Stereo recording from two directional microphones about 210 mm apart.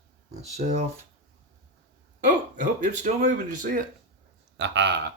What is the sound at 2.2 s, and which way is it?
Speech, 35° right (ahead or behind).